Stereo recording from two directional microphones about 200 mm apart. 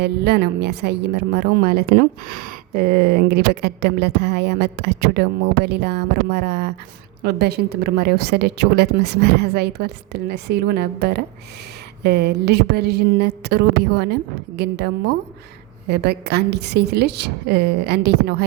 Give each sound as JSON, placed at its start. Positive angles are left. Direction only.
{"t": 0.0, "sound": "a woman's voice", "side_deg": -55}